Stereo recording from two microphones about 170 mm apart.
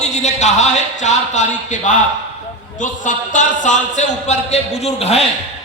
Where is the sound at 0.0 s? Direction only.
45° left (ahead or behind).